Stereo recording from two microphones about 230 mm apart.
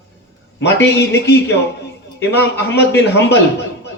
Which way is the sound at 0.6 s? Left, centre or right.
Left.